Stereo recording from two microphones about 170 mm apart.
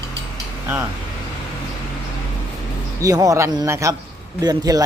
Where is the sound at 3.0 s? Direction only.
20° right (ahead or behind).